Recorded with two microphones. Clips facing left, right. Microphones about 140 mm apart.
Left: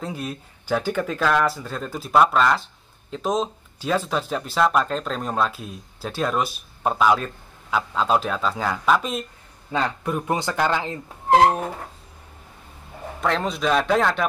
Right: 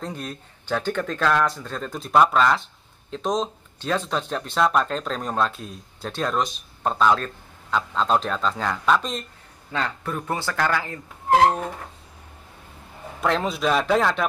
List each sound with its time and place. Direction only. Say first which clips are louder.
0.0 s speech: left 2 dB; 5° left (ahead or behind); by 11.0 s 20° left (ahead or behind)
13.2 s speech: even; centre (ahead or behind)